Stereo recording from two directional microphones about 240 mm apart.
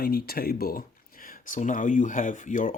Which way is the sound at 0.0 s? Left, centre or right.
Left.